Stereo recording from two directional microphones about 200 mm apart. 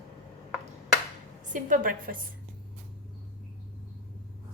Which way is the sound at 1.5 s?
40° right (ahead or behind).